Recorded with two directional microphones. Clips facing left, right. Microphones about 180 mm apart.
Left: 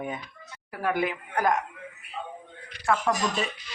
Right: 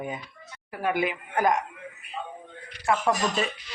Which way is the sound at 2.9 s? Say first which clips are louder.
Even; 10° right (ahead or behind).